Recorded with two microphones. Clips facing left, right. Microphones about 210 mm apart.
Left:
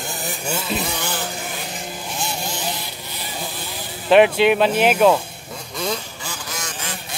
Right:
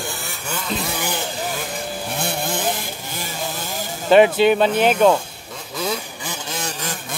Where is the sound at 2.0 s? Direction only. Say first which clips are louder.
Right 3 dB; 60° right (ahead or behind).